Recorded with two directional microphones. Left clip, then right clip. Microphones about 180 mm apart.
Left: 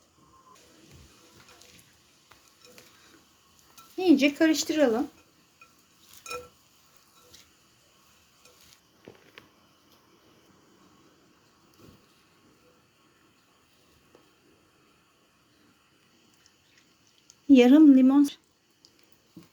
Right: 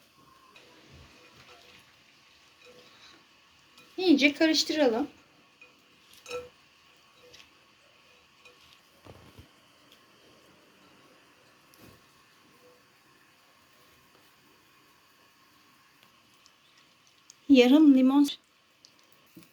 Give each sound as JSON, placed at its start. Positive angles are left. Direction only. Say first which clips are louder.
{"t": 3.9, "sound": "a woman's voice", "louder": "left 1 dB", "side_deg": 55}
{"t": 17.5, "sound": "a woman's voice", "louder": "left 2 dB", "side_deg": 50}